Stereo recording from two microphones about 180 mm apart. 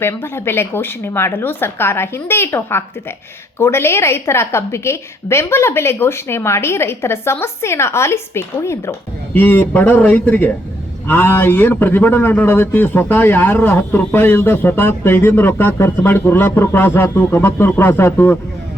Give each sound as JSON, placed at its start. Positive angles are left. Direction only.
{"t": 0.0, "sound": "a man's voice", "side_deg": 15}